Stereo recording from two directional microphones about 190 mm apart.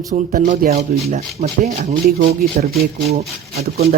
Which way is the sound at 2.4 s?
50° right (ahead or behind).